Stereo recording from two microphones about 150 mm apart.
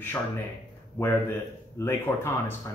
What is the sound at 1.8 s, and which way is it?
Speech, 15° left (ahead or behind).